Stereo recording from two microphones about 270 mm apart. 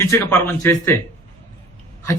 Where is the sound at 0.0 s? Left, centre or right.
Centre.